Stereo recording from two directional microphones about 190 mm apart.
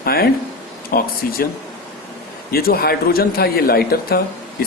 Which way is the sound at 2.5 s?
50° left (ahead or behind).